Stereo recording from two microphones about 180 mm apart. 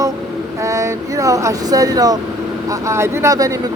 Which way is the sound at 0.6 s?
15° right (ahead or behind).